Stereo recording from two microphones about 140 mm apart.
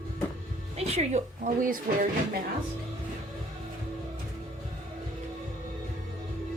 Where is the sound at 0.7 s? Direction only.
50° right (ahead or behind); by 2.1 s 75° right (ahead or behind).